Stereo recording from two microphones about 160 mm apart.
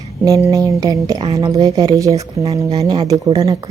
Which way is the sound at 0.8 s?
20° right (ahead or behind).